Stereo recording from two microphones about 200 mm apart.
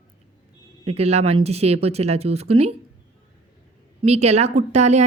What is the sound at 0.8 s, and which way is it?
A woman's voice, 30° right (ahead or behind).